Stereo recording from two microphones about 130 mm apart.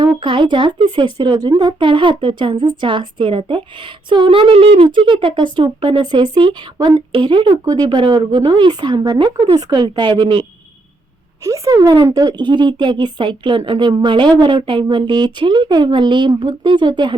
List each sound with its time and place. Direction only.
0.2 s speech: 40° right (ahead or behind)
6.7 s speech: 25° right (ahead or behind)
7.1 s speech: 40° right (ahead or behind)
11.4 s speech: 25° right (ahead or behind)